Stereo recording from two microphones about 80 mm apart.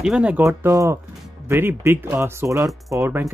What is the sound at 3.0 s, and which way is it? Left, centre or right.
Speech, right.